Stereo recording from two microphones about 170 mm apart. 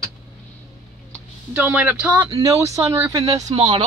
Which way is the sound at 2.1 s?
25° right (ahead or behind).